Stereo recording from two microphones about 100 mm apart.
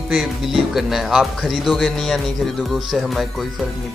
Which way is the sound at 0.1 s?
5° right (ahead or behind).